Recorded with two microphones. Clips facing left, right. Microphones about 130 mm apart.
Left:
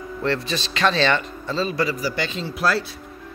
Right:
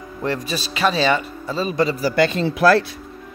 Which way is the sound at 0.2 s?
10° right (ahead or behind).